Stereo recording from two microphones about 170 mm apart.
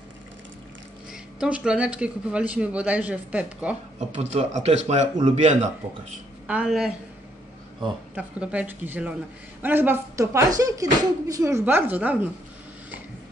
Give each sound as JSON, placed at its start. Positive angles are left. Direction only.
{"t": 1.4, "sound": "speech", "side_deg": -5}
{"t": 4.1, "sound": "a man's voice", "side_deg": -40}
{"t": 6.4, "sound": "speech", "side_deg": -5}
{"t": 8.1, "sound": "speech", "side_deg": -5}